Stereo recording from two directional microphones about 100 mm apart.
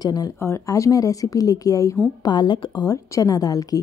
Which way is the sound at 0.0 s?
40° left (ahead or behind).